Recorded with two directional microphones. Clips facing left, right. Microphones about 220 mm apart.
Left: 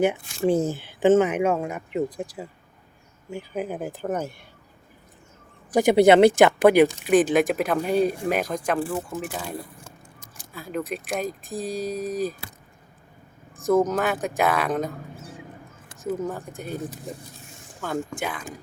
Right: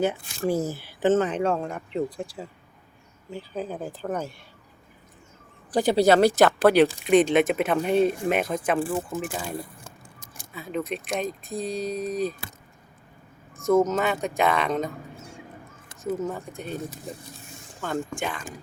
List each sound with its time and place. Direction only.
0.0 s speech: 15° left (ahead or behind)
0.5 s speech: 25° left (ahead or behind)
1.0 s speech: 10° left (ahead or behind)
2.0 s speech: 15° left (ahead or behind)
5.9 s speech: 20° left (ahead or behind); by 9.5 s centre (ahead or behind)
10.5 s speech: centre (ahead or behind)
13.7 s speech: 15° left (ahead or behind)
14.0 s speech: 5° left (ahead or behind)
17.7 s speech: 5° left (ahead or behind)